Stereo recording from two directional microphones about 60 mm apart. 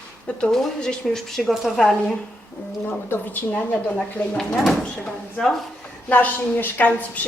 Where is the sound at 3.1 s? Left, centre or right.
Left.